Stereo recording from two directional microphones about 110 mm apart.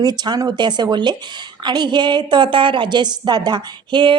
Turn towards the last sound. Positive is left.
turn(degrees=-50)  # may be behind; listen again after turning